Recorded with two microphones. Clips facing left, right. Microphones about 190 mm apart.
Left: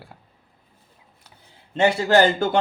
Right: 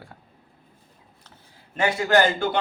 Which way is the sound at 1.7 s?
25° left (ahead or behind).